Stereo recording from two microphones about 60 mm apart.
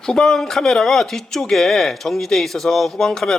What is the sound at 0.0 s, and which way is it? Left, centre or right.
Speech, centre.